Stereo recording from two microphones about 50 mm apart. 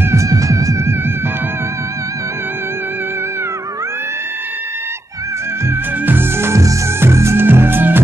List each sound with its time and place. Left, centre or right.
0.1 s music: right
6.0 s music: right
7.0 s music: right
7.4 s music: right